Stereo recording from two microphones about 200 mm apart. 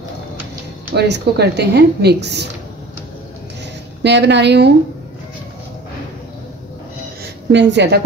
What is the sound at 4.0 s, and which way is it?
Speech, 60° right (ahead or behind).